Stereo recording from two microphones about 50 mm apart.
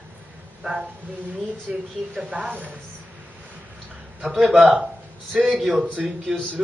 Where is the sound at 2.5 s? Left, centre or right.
Right.